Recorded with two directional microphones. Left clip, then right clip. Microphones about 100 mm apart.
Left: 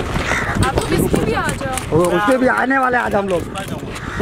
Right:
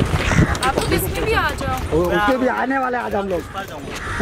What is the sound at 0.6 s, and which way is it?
Speech, centre (ahead or behind).